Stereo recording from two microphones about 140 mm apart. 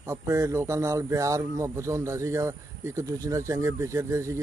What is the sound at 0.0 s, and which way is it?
Speech, 20° right (ahead or behind).